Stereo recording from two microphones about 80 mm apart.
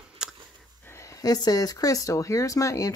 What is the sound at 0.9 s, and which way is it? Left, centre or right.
Speech, left.